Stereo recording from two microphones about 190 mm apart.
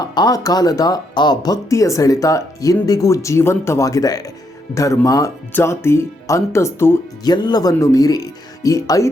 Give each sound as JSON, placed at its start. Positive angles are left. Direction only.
{"t": 0.0, "sound": "speech", "side_deg": 20}